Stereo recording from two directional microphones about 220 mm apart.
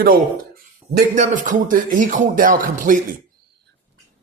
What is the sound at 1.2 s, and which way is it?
Speech, 35° right (ahead or behind).